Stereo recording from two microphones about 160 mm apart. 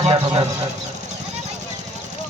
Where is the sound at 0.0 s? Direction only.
40° right (ahead or behind).